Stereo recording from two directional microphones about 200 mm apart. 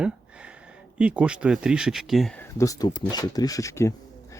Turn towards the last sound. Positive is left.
turn(degrees=15)  # may be behind; listen again after turning